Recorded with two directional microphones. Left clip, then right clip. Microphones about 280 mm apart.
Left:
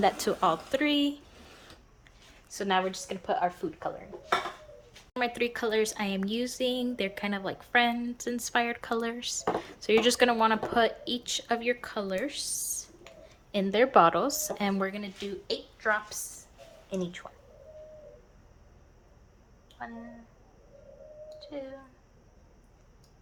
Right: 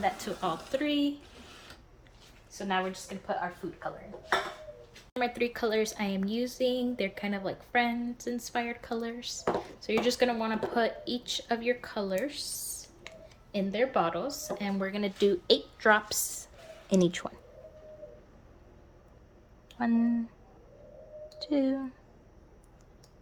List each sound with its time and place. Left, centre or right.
0.0 s a woman's voice: centre
2.5 s speech: centre; by 3.9 s left
5.1 s a woman's voice: centre
15.2 s a woman's voice: right
19.8 s a woman's voice: right
21.3 s a sound: right